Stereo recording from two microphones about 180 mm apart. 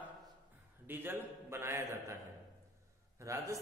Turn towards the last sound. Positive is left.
turn(degrees=-15)  # may be behind; listen again after turning